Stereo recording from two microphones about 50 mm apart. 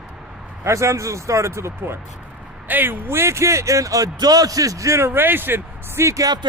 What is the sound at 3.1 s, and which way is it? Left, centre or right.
Speech, right.